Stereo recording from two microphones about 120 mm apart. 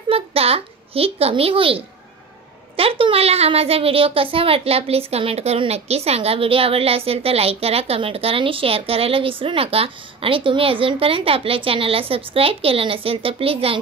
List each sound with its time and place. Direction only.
0.1 s a child's voice: 55° right (ahead or behind)